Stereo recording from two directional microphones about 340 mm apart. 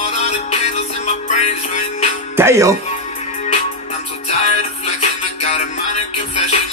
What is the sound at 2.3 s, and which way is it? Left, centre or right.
Speech, centre.